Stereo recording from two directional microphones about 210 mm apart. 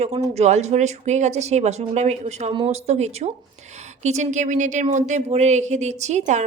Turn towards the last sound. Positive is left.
turn(degrees=-35)  # may be behind; listen again after turning